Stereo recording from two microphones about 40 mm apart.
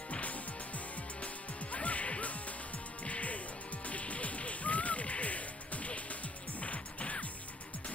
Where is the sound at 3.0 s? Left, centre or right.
Left.